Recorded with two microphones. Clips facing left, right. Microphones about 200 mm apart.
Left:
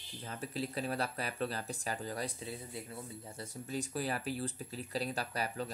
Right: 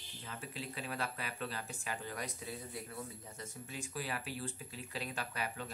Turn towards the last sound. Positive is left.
turn(degrees=40)  # may be behind; listen again after turning